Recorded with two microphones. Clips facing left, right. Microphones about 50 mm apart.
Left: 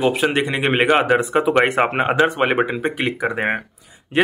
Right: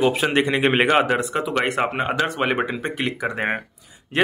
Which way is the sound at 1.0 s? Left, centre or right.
Centre.